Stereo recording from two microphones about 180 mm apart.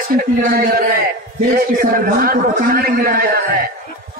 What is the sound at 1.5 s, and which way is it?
A man's voice, 50° right (ahead or behind).